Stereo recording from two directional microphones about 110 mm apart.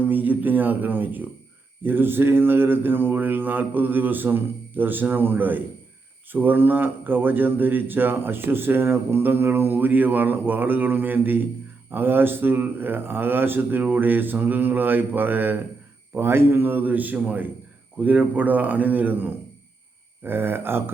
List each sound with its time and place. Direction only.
0.0 s speech: 15° right (ahead or behind)